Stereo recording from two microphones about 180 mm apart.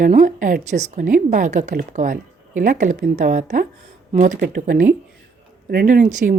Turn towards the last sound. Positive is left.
turn(degrees=-45)  # may be behind; listen again after turning